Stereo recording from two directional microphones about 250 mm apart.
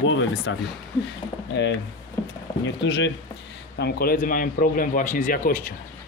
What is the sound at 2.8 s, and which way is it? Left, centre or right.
Speech, left.